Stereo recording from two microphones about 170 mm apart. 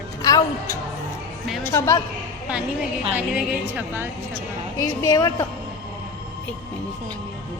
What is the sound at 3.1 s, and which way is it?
Speech, 10° right (ahead or behind).